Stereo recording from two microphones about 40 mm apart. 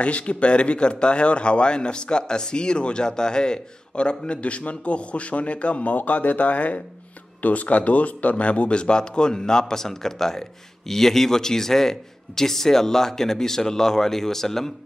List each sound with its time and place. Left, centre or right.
0.0 s a man's voice: left; by 14.7 s centre